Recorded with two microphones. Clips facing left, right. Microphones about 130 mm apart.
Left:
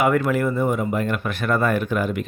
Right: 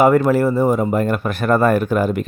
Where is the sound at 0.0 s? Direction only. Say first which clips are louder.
Right 6 dB; 35° right (ahead or behind).